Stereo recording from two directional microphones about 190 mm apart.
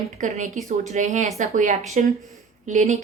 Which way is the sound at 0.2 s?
40° right (ahead or behind).